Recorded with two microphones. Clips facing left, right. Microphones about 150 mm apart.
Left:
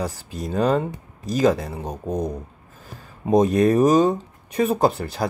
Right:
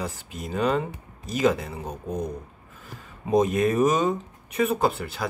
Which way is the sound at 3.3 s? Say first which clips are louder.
Left 4 dB; 35° left (ahead or behind).